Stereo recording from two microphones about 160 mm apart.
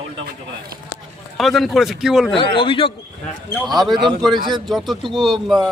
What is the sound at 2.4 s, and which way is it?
Speech, 35° left (ahead or behind).